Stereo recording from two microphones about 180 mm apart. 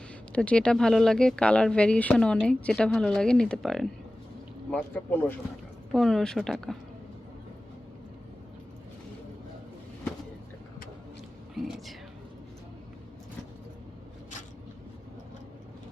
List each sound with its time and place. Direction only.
0.3 s speech: 5° left (ahead or behind)
11.5 s speech: centre (ahead or behind)